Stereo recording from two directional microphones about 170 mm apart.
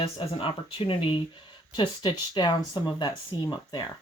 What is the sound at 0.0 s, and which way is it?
Speech, 30° left (ahead or behind).